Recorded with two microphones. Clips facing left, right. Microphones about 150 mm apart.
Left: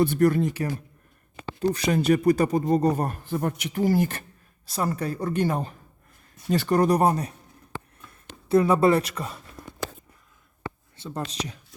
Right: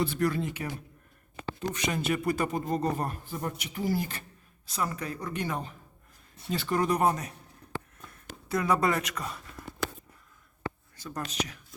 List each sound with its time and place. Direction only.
0.0 s speech: 50° left (ahead or behind)
3.2 s speech: 65° left (ahead or behind)
4.7 s speech: 35° left (ahead or behind)
8.4 s speech: 25° left (ahead or behind)
10.9 s speech: 25° left (ahead or behind)